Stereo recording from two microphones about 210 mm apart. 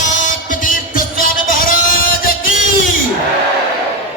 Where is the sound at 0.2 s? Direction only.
40° left (ahead or behind).